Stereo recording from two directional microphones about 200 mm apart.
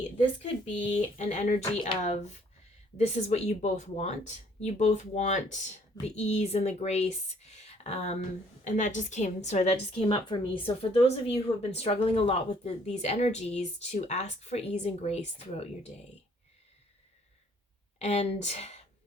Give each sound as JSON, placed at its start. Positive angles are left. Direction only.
{"t": 1.2, "sound": "a woman's voice", "side_deg": 35}
{"t": 18.0, "sound": "a woman's voice", "side_deg": 35}